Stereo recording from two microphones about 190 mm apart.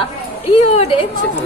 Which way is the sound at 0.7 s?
30° left (ahead or behind).